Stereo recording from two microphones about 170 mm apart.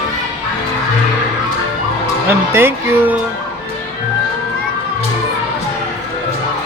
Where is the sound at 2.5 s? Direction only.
15° right (ahead or behind).